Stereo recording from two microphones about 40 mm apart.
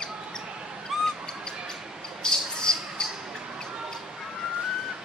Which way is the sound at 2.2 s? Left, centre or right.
Centre.